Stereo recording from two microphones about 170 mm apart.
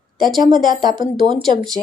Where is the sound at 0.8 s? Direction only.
25° right (ahead or behind).